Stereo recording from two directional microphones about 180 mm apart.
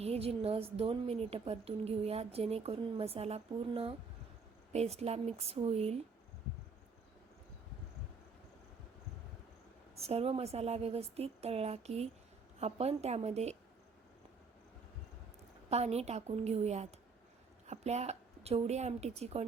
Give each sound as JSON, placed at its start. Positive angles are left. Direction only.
{"t": 0.0, "sound": "a woman's voice", "side_deg": -35}
{"t": 9.9, "sound": "a woman's voice", "side_deg": -35}
{"t": 15.7, "sound": "a woman's voice", "side_deg": -35}